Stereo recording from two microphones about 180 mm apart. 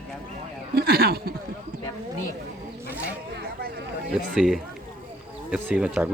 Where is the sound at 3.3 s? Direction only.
55° right (ahead or behind).